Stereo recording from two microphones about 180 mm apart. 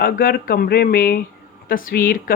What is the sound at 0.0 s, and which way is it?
Speech, 55° left (ahead or behind).